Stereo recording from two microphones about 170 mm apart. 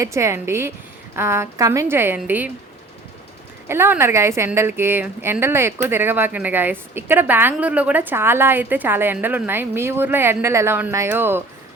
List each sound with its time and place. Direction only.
0.0 s a woman's voice: 15° right (ahead or behind)
3.7 s a woman's voice: 15° right (ahead or behind)